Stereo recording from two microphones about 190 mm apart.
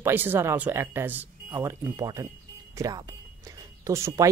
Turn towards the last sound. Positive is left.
turn(degrees=-15)  # may be behind; listen again after turning